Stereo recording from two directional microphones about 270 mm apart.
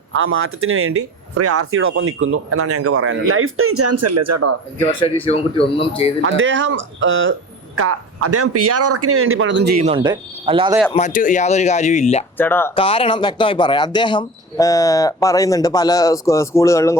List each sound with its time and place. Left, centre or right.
0.1 s speech: right
4.9 s speech: centre
6.2 s speech: right
7.8 s speech: right
9.8 s speech: centre
10.9 s speech: left
12.4 s speech: centre
12.7 s speech: centre